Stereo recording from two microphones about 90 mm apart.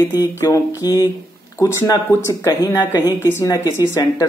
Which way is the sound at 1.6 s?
30° left (ahead or behind).